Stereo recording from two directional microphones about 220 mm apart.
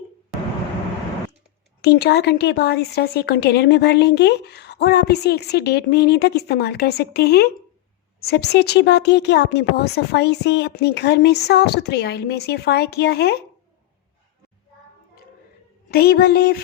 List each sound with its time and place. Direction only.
1.8 s speech: 50° left (ahead or behind)
15.9 s speech: 45° left (ahead or behind)